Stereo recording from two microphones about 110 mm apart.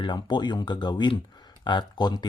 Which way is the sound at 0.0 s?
45° left (ahead or behind).